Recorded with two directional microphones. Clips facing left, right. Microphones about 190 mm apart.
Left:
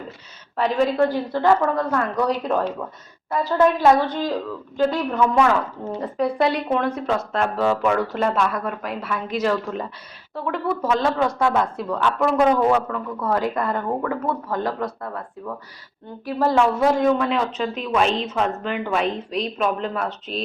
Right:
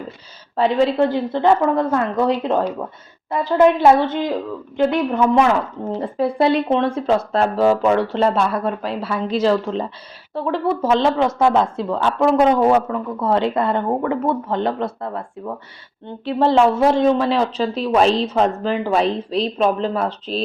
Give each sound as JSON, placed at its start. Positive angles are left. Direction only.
{"t": 0.5, "sound": "speech", "side_deg": -30}